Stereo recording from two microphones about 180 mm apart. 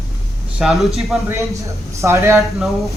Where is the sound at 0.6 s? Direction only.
Centre (ahead or behind).